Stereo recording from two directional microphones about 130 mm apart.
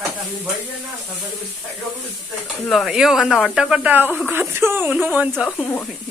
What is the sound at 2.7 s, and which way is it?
Speech, centre (ahead or behind).